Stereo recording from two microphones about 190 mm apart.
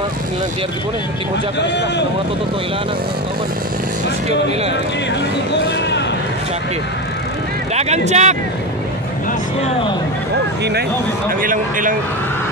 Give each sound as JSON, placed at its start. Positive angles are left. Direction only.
{"t": 1.6, "sound": "speech", "side_deg": 65}
{"t": 5.5, "sound": "a sound", "side_deg": 65}
{"t": 7.7, "sound": "speech", "side_deg": -35}
{"t": 10.6, "sound": "speech", "side_deg": -60}
{"t": 11.4, "sound": "a man's voice", "side_deg": -45}